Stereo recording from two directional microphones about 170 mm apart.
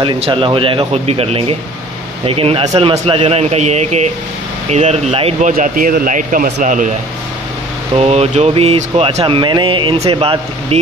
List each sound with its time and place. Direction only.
0.0 s speech: 30° right (ahead or behind)
5.5 s a man's voice: 55° right (ahead or behind)
7.9 s speech: 35° right (ahead or behind)